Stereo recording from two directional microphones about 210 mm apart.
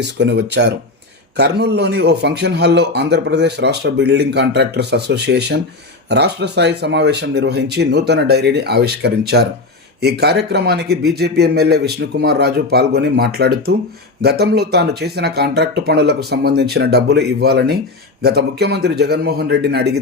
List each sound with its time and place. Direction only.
0.0 s a man's voice: 55° right (ahead or behind)